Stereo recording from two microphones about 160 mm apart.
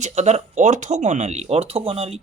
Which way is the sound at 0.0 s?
45° right (ahead or behind).